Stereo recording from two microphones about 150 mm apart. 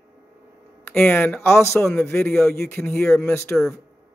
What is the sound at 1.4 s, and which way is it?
Speech, 15° left (ahead or behind).